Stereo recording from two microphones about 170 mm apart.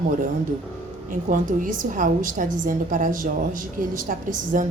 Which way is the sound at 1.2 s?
50° right (ahead or behind).